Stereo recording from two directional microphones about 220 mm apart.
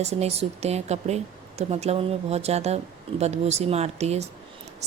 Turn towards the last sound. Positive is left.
turn(degrees=-30)  # may be behind; listen again after turning